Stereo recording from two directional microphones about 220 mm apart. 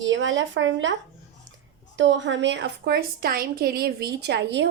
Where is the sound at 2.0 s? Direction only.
55° right (ahead or behind).